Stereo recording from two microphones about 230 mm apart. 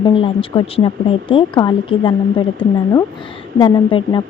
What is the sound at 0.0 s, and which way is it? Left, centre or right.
A woman's voice, left.